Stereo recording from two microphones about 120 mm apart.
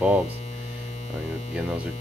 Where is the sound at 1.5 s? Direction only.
10° right (ahead or behind).